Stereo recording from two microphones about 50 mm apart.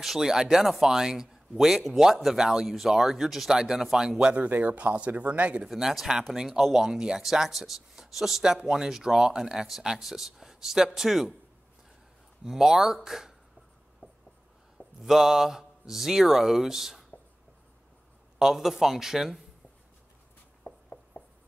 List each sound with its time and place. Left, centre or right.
0.0 s speech: centre
4.4 s speech: right
5.7 s speech: centre
12.4 s speech: centre
15.0 s speech: centre
18.4 s speech: centre
20.6 s a sound: left